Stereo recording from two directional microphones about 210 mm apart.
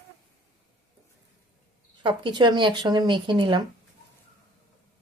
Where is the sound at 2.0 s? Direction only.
20° right (ahead or behind).